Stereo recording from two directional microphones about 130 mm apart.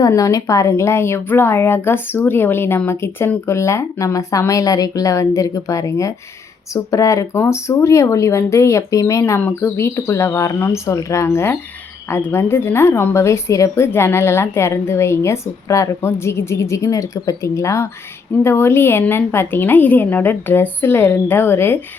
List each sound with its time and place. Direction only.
0.0 s a woman's voice: 25° left (ahead or behind)